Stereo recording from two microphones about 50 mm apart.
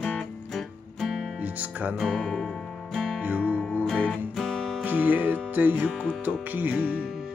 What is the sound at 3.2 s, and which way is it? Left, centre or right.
Music, right.